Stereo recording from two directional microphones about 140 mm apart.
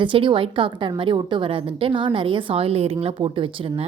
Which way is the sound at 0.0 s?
35° right (ahead or behind).